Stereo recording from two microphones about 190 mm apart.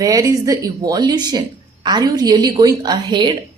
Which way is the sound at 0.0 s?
20° right (ahead or behind).